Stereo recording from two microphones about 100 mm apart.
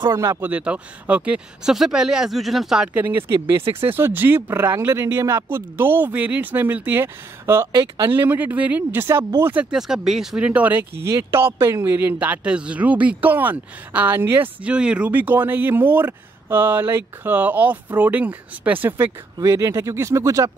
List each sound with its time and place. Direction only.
0.1 s speech: 30° right (ahead or behind)
0.4 s speech: 15° right (ahead or behind)
3.8 s speech: 20° right (ahead or behind)
9.7 s speech: 5° right (ahead or behind)
11.1 s speech: 25° right (ahead or behind)